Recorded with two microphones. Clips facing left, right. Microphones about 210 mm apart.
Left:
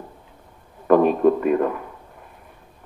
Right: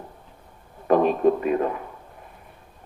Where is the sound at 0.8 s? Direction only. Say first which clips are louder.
Left 3 dB; 50° left (ahead or behind).